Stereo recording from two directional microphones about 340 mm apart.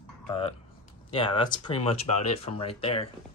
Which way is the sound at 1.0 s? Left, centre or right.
Centre.